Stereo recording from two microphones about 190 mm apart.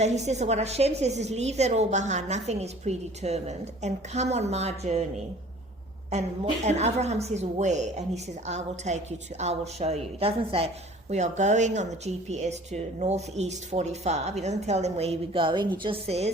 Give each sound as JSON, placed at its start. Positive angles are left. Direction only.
{"t": 0.0, "sound": "a woman's voice", "side_deg": -35}